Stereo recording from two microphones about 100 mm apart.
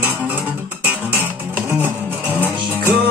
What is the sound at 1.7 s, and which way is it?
Music, 20° right (ahead or behind).